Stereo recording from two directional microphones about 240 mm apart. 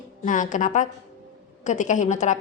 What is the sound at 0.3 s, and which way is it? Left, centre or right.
A woman's voice, left.